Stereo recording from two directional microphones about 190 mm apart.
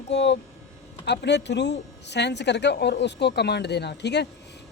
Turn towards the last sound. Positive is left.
turn(degrees=60)  # may be behind; listen again after turning